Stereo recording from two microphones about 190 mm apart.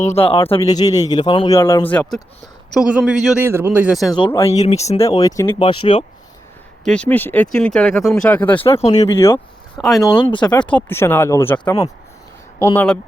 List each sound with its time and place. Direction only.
0.0 s speech: 30° left (ahead or behind)
0.6 s speech: 20° left (ahead or behind)
1.5 s speech: 15° left (ahead or behind)
1.9 s speech: 5° left (ahead or behind)
4.1 s speech: 20° left (ahead or behind)
4.5 s speech: 35° left (ahead or behind)
5.0 s speech: 15° left (ahead or behind)
6.8 s speech: 5° left (ahead or behind)
8.7 s speech: 30° left (ahead or behind)
9.2 s speech: 15° left (ahead or behind)
10.6 s speech: 5° left (ahead or behind)